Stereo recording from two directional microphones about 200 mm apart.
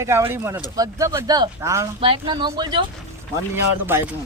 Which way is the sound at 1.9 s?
25° right (ahead or behind).